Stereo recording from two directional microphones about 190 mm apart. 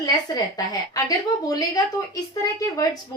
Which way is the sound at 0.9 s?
20° left (ahead or behind).